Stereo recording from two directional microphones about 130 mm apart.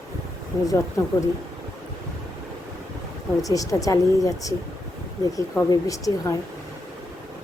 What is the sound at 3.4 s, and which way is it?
A woman's voice, 25° left (ahead or behind).